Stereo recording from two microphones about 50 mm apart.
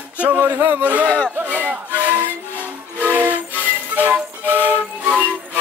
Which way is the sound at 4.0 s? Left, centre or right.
Right.